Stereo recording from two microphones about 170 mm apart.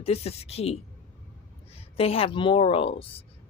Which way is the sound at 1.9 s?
35° left (ahead or behind).